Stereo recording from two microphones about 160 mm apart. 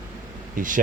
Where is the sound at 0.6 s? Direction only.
55° right (ahead or behind).